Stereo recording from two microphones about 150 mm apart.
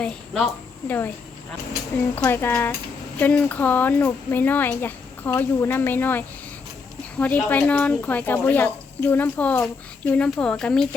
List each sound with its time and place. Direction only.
0.0 s a woman's voice: 5° left (ahead or behind)
2.1 s speech: 15° left (ahead or behind)